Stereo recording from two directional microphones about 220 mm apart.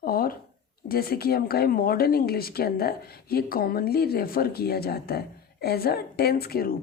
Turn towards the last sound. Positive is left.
turn(degrees=45)  # may be behind; listen again after turning